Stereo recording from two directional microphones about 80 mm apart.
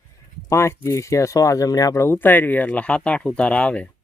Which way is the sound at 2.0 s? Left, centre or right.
Left.